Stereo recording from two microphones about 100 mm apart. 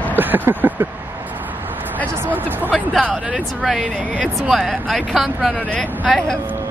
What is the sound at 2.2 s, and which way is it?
Vehicle, 20° right (ahead or behind).